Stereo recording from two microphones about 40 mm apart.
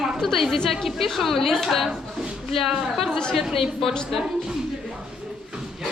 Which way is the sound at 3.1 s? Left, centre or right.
Centre.